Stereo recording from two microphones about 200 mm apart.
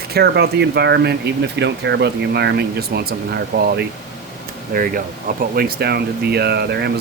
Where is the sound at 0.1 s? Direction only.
55° right (ahead or behind).